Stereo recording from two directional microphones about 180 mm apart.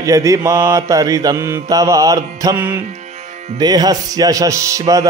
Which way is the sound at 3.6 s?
20° right (ahead or behind).